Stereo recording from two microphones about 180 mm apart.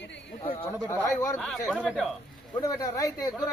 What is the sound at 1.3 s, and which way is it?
Speech, 5° left (ahead or behind).